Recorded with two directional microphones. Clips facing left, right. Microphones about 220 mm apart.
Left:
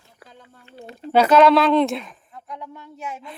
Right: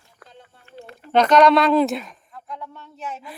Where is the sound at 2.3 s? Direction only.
15° left (ahead or behind).